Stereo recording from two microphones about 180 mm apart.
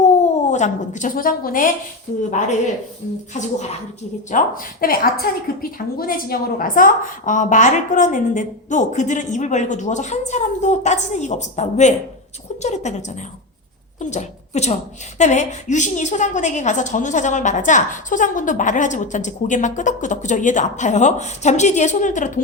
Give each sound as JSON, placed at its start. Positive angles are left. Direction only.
{"t": 0.0, "sound": "a woman's voice", "side_deg": 40}
{"t": 3.3, "sound": "a woman's voice", "side_deg": 40}